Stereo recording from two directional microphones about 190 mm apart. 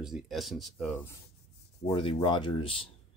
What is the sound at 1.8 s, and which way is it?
Speech, 30° left (ahead or behind).